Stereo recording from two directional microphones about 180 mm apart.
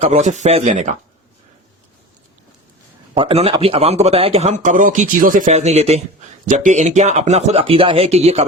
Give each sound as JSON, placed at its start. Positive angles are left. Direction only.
{"t": 0.0, "sound": "speech", "side_deg": -40}
{"t": 3.2, "sound": "speech", "side_deg": -30}
{"t": 5.5, "sound": "speech", "side_deg": -35}